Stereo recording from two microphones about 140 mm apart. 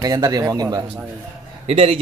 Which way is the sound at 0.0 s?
25° right (ahead or behind).